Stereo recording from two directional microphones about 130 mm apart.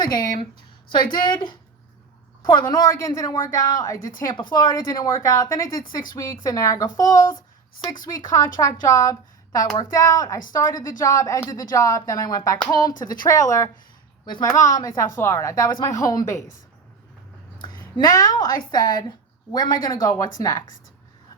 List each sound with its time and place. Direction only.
0.0 s a woman's voice: 30° left (ahead or behind)
8.9 s a woman's voice: 25° left (ahead or behind)
17.6 s a woman's voice: 35° left (ahead or behind)